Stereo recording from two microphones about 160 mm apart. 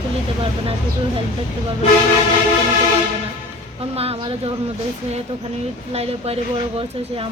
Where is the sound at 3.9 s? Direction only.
40° right (ahead or behind).